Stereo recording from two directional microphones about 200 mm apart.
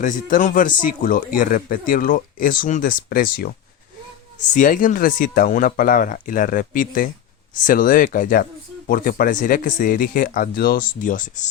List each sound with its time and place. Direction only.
0.0 s speech: 40° left (ahead or behind)